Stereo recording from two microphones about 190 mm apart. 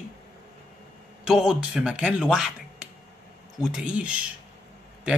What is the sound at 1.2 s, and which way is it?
Speech, centre (ahead or behind).